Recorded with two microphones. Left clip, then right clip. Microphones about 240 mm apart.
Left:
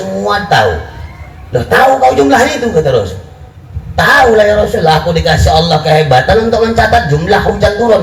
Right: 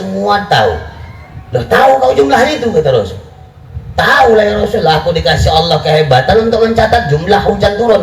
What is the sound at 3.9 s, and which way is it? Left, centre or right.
Speech, right.